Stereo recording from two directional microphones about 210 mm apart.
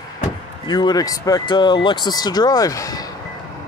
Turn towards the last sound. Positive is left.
turn(degrees=15)  # may be behind; listen again after turning